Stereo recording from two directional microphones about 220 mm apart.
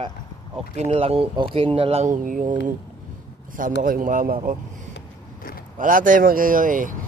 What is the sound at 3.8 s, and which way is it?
Speech, 40° right (ahead or behind).